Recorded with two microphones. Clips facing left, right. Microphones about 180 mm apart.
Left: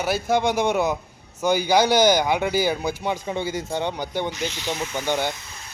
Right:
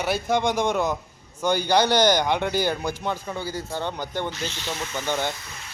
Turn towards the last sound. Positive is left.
turn(degrees=15)  # may be behind; listen again after turning